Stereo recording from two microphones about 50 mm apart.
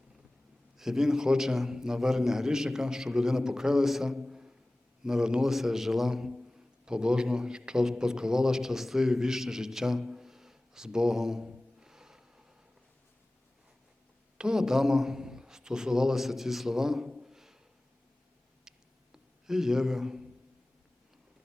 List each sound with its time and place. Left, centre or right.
0.8 s a man's voice: centre
4.3 s a sound: centre
5.0 s a man's voice: centre
14.3 s a man's voice: centre
18.7 s a sound: centre
19.1 s speech: centre